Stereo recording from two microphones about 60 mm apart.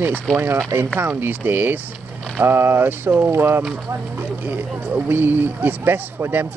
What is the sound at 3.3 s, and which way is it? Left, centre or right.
Speech, right.